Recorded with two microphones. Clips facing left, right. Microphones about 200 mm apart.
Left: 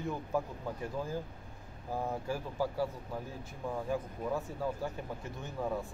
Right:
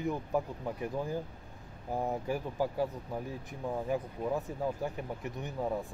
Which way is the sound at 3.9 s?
15° right (ahead or behind).